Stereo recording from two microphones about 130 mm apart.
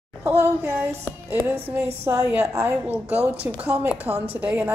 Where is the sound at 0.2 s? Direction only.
20° right (ahead or behind).